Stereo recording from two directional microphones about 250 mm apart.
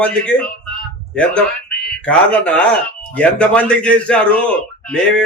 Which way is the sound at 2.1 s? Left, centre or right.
Centre.